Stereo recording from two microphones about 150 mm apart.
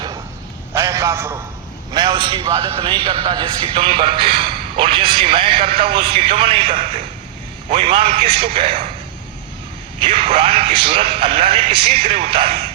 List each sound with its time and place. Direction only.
0.7 s a sound: 20° right (ahead or behind)
1.9 s a man's voice: 30° right (ahead or behind)
10.0 s a man's voice: 40° right (ahead or behind)